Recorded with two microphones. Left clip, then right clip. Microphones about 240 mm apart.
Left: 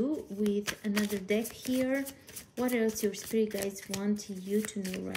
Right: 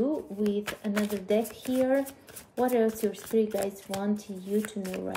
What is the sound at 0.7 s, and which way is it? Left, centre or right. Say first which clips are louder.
Speech: right 2 dB; left.